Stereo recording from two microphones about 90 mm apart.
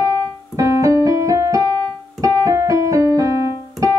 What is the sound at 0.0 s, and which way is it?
Keyboard, 45° right (ahead or behind).